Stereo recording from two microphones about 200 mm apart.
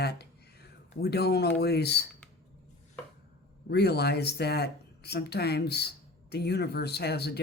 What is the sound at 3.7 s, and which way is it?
Speech, 55° left (ahead or behind).